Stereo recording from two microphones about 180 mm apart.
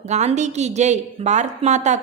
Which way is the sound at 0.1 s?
40° right (ahead or behind).